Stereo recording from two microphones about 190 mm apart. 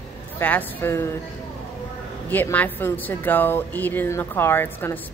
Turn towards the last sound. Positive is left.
turn(degrees=10)  # may be behind; listen again after turning